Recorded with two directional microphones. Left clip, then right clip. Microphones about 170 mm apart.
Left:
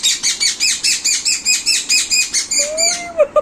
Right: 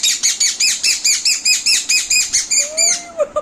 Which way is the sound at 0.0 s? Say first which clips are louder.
Even; 20° right (ahead or behind).